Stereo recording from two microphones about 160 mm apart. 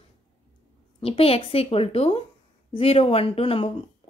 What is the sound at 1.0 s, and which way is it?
Speech, 35° left (ahead or behind).